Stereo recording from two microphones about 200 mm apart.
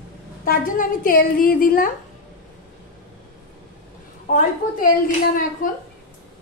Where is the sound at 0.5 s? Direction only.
45° left (ahead or behind).